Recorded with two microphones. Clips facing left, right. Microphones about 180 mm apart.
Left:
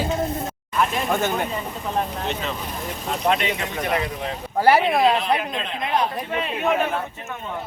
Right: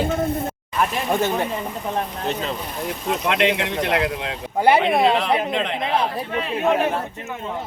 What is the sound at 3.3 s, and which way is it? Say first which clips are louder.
Speech: right 3 dB; 85° right.